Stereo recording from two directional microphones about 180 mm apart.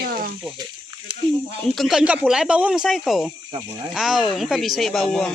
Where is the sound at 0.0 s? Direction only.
55° right (ahead or behind).